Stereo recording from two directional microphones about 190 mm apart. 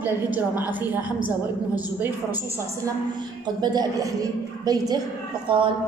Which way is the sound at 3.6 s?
20° right (ahead or behind).